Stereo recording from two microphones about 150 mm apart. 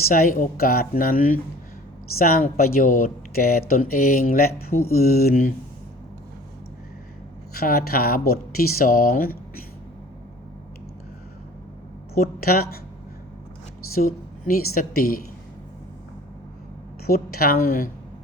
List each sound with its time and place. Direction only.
0.1 s speech: 65° left (ahead or behind)
7.5 s speech: 90° left
12.1 s speech: 85° left
13.9 s speech: 75° left (ahead or behind)
17.1 s a woman's voice: 90° left